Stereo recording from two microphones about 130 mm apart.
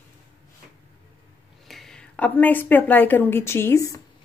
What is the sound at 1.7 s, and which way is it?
A woman's voice, 5° left (ahead or behind).